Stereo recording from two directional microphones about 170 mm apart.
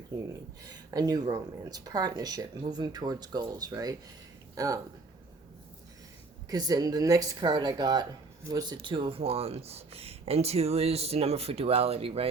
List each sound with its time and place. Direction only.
0.6 s speech: 20° right (ahead or behind)
6.5 s speech: 25° right (ahead or behind)